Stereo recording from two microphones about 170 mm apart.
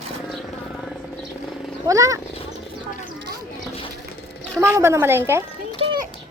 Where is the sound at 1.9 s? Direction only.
20° right (ahead or behind).